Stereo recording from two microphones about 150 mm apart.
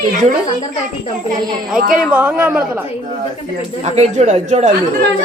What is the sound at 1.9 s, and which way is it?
Speech, 10° right (ahead or behind).